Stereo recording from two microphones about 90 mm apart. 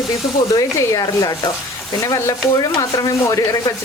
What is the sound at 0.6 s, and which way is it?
Speech, 40° left (ahead or behind).